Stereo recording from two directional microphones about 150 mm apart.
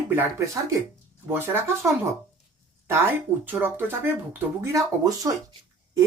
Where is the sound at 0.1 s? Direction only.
15° right (ahead or behind).